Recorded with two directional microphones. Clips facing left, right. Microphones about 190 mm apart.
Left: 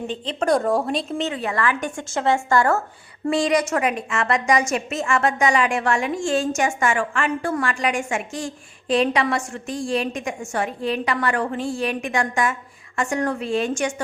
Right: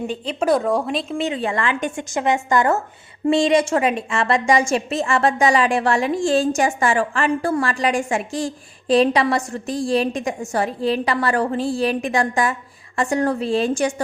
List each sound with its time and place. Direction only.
0.1 s speech: 10° right (ahead or behind)
1.4 s a woman's voice: 25° right (ahead or behind)